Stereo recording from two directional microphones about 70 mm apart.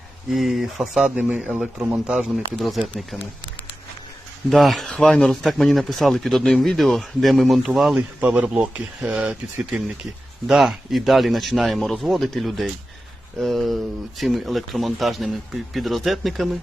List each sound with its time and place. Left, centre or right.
0.3 s speech: centre
1.1 s a man's voice: right
2.3 s speech: centre
4.4 s speech: centre
4.9 s speech: centre
7.9 s a man's voice: right; by 16.6 s centre